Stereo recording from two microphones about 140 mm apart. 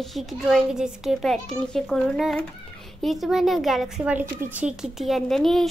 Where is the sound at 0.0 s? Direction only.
Centre (ahead or behind).